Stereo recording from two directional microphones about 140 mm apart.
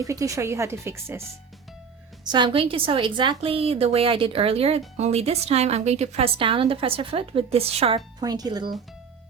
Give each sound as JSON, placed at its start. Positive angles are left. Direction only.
{"t": 0.0, "sound": "speech", "side_deg": -25}
{"t": 2.2, "sound": "a woman's voice", "side_deg": -35}
{"t": 7.9, "sound": "speech", "side_deg": -30}